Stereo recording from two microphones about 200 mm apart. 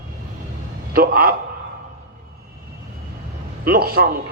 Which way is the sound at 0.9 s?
50° right (ahead or behind).